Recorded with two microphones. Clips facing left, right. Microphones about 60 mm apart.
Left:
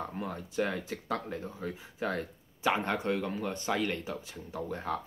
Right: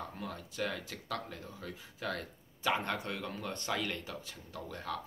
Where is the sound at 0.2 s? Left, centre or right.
Left.